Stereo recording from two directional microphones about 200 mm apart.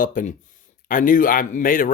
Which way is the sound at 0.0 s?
40° left (ahead or behind).